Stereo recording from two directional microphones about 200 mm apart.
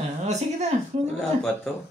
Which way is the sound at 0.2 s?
35° right (ahead or behind).